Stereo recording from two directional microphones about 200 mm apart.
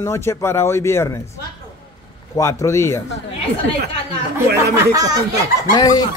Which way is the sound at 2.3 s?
15° left (ahead or behind).